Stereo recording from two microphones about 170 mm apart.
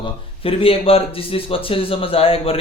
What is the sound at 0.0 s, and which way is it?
Speech, 35° left (ahead or behind).